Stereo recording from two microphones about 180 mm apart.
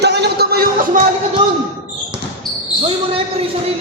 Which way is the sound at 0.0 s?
65° right (ahead or behind).